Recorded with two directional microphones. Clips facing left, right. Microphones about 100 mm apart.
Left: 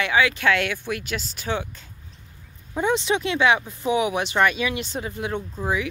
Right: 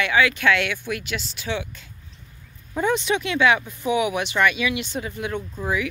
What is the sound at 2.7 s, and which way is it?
Speech, 25° left (ahead or behind).